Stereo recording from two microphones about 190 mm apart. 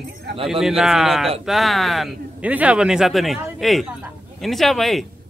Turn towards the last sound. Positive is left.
turn(degrees=0)  # may be behind; listen again after turning